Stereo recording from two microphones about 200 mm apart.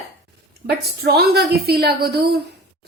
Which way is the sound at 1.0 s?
50° right (ahead or behind).